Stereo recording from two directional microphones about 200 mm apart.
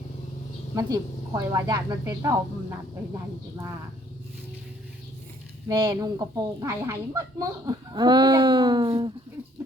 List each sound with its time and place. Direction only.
0.8 s speech: 15° right (ahead or behind)
5.6 s speech: 20° right (ahead or behind)
7.9 s a sound: 20° right (ahead or behind)